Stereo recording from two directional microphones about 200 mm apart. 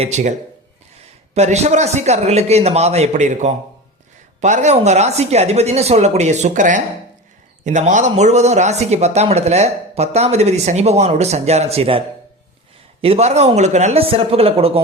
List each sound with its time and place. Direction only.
0.0 s a man's voice: 35° right (ahead or behind)